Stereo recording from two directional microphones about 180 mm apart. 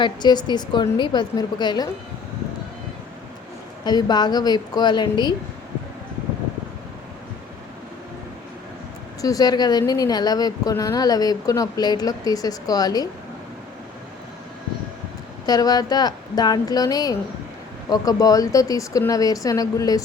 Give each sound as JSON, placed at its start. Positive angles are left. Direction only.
{"t": 0.0, "sound": "a woman's voice", "side_deg": 25}
{"t": 3.8, "sound": "a woman's voice", "side_deg": 25}
{"t": 9.2, "sound": "a woman's voice", "side_deg": 20}
{"t": 15.4, "sound": "a woman's voice", "side_deg": 20}